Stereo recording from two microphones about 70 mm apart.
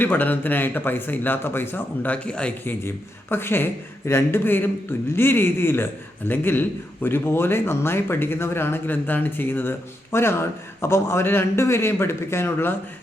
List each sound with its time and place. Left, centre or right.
0.0 s speech: left
2.1 s speech: centre
2.6 s a man's voice: left